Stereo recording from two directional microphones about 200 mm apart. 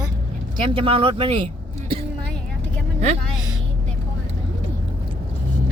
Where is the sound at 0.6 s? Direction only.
25° right (ahead or behind).